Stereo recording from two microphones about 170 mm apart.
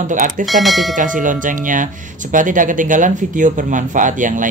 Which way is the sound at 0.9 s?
50° right (ahead or behind).